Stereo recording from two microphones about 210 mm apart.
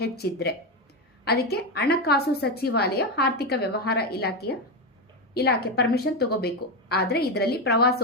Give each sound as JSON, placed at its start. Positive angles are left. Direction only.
{"t": 0.0, "sound": "a woman's voice", "side_deg": 50}